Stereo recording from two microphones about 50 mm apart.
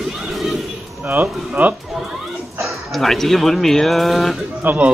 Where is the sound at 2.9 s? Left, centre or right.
Centre.